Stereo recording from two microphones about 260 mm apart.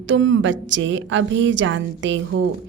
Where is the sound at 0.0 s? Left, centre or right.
Right.